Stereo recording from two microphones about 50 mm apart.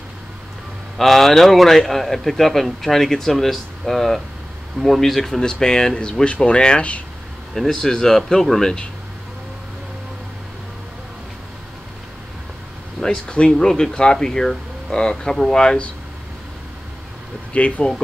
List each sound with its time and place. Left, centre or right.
0.9 s a man's voice: centre; by 7.0 s left
7.5 s speech: centre
13.0 s speech: centre
17.5 s speech: left